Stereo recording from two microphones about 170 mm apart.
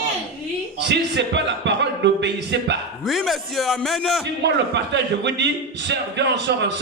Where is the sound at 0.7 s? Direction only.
90° right.